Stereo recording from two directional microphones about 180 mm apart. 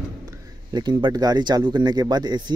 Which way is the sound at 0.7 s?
25° right (ahead or behind).